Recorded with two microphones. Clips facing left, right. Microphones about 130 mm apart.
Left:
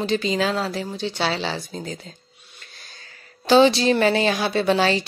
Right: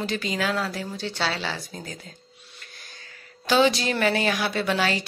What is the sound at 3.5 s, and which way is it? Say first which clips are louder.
Speech: left 6 dB; 30° left (ahead or behind).